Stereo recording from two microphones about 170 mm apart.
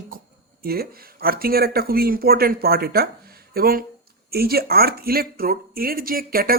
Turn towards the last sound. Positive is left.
turn(degrees=-60)  # may be behind; listen again after turning